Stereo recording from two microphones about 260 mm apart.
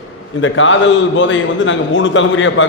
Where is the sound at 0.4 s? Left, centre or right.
Left.